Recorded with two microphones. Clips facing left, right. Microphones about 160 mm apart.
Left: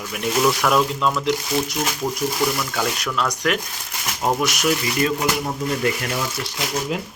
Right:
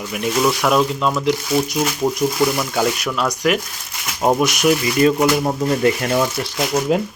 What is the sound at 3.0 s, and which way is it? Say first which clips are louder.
Speech: right 3 dB; 10° right (ahead or behind).